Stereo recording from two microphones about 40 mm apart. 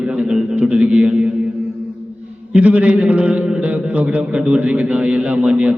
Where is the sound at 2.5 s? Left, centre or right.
Right.